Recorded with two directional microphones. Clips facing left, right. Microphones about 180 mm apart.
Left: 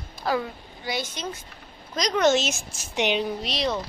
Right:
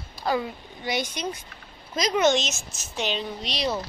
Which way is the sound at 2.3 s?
10° left (ahead or behind).